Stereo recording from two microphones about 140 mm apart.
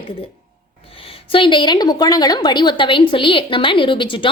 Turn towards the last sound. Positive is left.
turn(degrees=35)  # may be behind; listen again after turning